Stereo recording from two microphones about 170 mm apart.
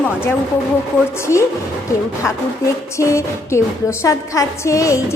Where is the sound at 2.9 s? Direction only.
15° left (ahead or behind).